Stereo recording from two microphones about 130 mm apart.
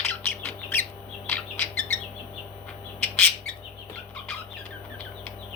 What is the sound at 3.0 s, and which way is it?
Bird, 10° left (ahead or behind).